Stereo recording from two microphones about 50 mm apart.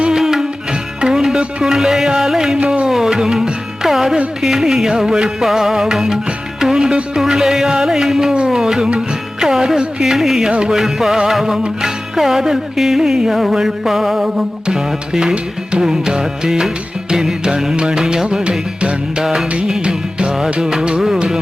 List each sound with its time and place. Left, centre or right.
0.0 s music: centre
2.6 s music: centre